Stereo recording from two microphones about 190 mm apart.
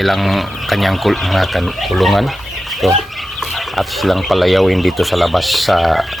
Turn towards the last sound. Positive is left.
turn(degrees=0)  # may be behind; listen again after turning